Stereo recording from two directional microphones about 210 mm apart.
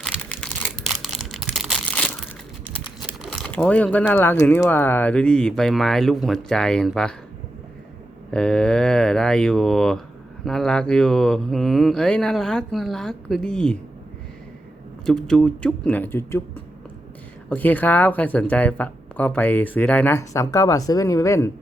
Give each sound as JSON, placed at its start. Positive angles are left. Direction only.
{"t": 0.0, "sound": "crumpling", "side_deg": 5}
{"t": 3.0, "sound": "speech", "side_deg": 0}
{"t": 8.3, "sound": "speech", "side_deg": 5}
{"t": 15.0, "sound": "speech", "side_deg": 5}
{"t": 17.5, "sound": "speech", "side_deg": 10}